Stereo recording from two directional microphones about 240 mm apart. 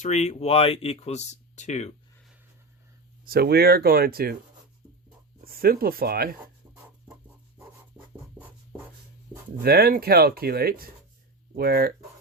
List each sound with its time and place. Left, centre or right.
0.0 s speech: left
3.2 s speech: right
5.5 s speech: right
8.1 s music: centre
9.6 s speech: right